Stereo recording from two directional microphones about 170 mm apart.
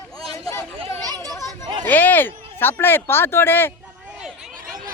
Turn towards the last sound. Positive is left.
turn(degrees=15)  # may be behind; listen again after turning